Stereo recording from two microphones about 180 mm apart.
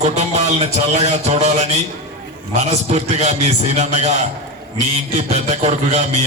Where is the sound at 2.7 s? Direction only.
35° right (ahead or behind).